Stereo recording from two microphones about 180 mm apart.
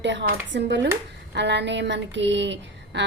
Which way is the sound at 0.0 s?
80° right.